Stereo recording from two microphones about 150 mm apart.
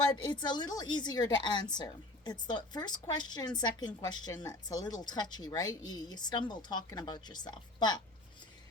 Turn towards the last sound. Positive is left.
turn(degrees=30)  # may be behind; listen again after turning